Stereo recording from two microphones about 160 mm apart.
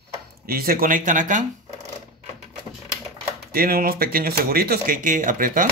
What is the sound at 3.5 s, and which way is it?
Speech, 70° right (ahead or behind).